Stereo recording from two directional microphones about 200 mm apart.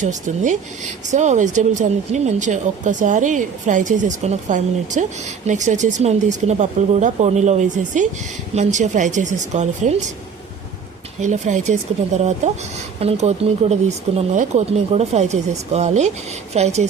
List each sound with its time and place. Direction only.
0.0 s speech: 40° right (ahead or behind)
11.2 s speech: 35° right (ahead or behind)
13.0 s speech: 30° right (ahead or behind)